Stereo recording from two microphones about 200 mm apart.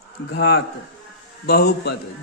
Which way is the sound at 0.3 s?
55° left (ahead or behind).